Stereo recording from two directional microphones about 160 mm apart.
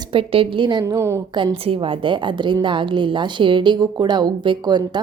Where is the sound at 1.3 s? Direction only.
30° right (ahead or behind).